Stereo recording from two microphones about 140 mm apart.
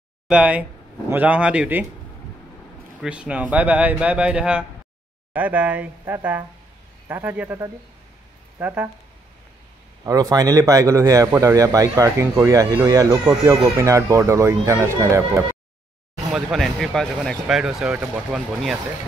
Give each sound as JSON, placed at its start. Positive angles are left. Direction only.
{"t": 0.3, "sound": "speech", "side_deg": -10}
{"t": 3.0, "sound": "speech", "side_deg": -5}
{"t": 10.0, "sound": "speech", "side_deg": -25}
{"t": 16.3, "sound": "speech", "side_deg": 0}